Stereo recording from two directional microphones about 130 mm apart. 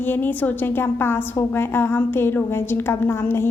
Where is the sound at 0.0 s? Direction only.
15° left (ahead or behind).